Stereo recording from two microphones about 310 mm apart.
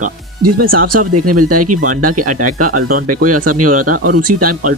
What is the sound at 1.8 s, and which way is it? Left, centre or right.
Speech, right.